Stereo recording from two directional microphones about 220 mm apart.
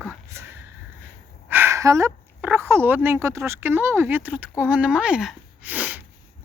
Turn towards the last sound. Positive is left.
turn(degrees=-5)  # may be behind; listen again after turning